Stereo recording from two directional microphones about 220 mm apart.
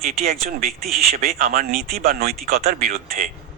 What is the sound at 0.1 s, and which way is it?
A man's voice, 45° right (ahead or behind).